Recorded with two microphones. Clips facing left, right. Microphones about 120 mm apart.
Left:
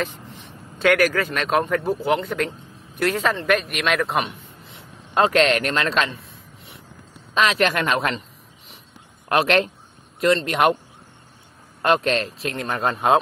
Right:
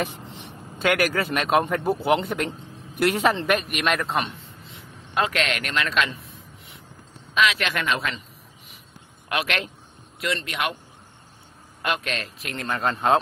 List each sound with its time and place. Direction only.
0.2 s a sound: 20° right (ahead or behind)
0.8 s a man's voice: 5° right (ahead or behind)
5.1 s a man's voice: 35° left (ahead or behind)
7.3 s a man's voice: 40° left (ahead or behind)
9.3 s a man's voice: 40° left (ahead or behind)
11.8 s a man's voice: 40° left (ahead or behind); by 12.9 s 20° left (ahead or behind)